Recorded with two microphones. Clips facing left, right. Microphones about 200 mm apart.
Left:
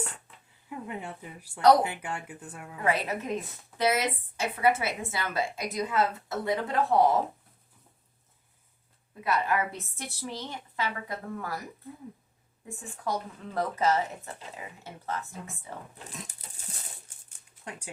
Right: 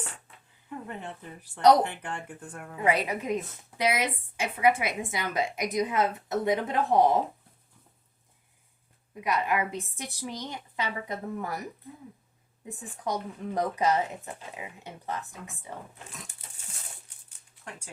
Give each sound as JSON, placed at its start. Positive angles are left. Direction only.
{"t": 0.9, "sound": "speech", "side_deg": 10}
{"t": 2.7, "sound": "speech", "side_deg": -15}
{"t": 9.2, "sound": "speech", "side_deg": -15}
{"t": 12.6, "sound": "speech", "side_deg": -15}